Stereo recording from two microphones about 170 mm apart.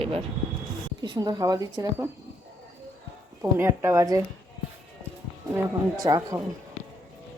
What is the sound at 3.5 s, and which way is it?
Speech, 15° right (ahead or behind).